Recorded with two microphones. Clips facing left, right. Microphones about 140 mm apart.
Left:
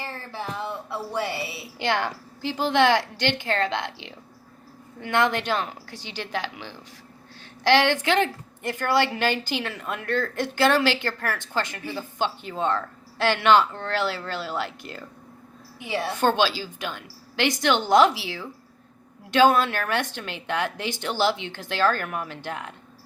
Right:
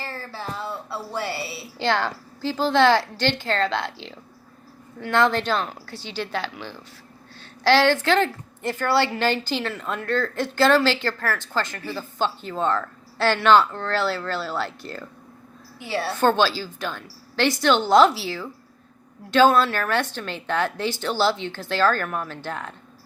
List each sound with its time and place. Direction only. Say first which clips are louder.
0.0 s a sound: even; 20° left (ahead or behind)
0.5 s a woman's voice: even; 15° left (ahead or behind)
19.3 s a woman's voice: right 2 dB; 15° left (ahead or behind)